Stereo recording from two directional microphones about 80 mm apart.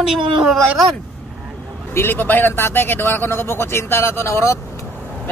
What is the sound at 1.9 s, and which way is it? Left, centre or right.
Speech, left.